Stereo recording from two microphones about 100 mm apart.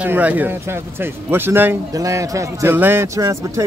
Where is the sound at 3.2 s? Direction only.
30° right (ahead or behind).